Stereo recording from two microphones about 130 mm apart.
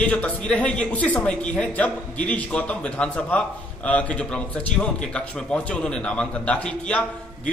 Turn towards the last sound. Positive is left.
turn(degrees=10)  # may be behind; listen again after turning